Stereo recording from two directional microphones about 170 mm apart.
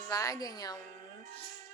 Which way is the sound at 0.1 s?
20° left (ahead or behind).